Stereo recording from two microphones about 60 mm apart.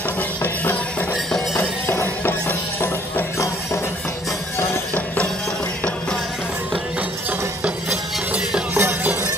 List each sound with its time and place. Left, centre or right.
1.9 s music: left
2.4 s music: left
8.3 s music: centre
8.7 s music: right